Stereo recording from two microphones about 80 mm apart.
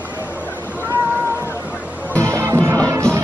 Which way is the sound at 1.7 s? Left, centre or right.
Centre.